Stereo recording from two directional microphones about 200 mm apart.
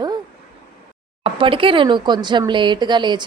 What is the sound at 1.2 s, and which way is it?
Speech, 25° right (ahead or behind).